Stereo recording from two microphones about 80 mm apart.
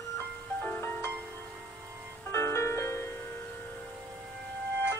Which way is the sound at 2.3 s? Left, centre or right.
Left.